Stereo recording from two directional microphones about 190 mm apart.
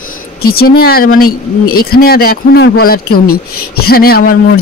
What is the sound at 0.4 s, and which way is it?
Speech, 55° left (ahead or behind).